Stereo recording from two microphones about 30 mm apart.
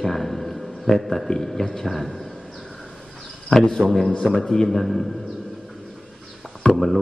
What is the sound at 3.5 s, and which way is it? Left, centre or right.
Speech, centre.